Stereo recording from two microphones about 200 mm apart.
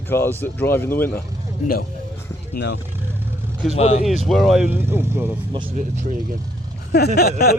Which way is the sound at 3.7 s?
35° left (ahead or behind).